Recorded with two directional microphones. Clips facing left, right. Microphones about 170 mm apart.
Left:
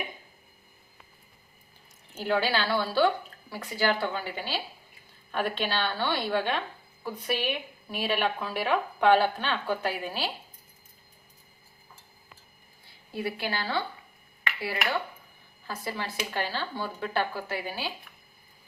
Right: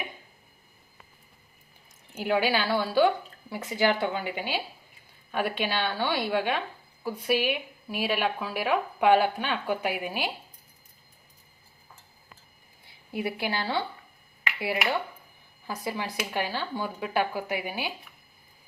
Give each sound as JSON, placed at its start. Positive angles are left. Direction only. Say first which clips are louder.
{"t": 2.1, "sound": "a woman's voice", "louder": "right 1 dB", "side_deg": -15}
{"t": 13.1, "sound": "a woman's voice", "louder": "right 2 dB", "side_deg": -20}
{"t": 15.6, "sound": "a woman's voice", "louder": "right 2 dB", "side_deg": -15}